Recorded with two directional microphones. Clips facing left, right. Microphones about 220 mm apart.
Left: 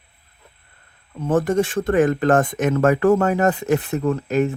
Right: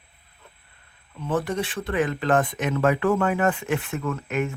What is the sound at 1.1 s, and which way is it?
Speech, 45° left (ahead or behind).